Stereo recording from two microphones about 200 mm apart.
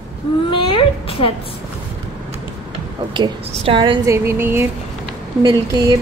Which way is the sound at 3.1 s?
25° right (ahead or behind).